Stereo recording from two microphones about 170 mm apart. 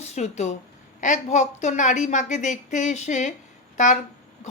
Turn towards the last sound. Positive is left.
turn(degrees=45)  # may be behind; listen again after turning